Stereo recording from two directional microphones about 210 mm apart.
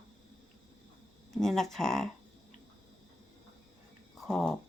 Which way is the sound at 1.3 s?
Centre (ahead or behind).